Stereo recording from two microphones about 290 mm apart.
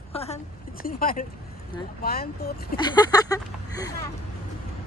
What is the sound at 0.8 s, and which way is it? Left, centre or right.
Speech, left.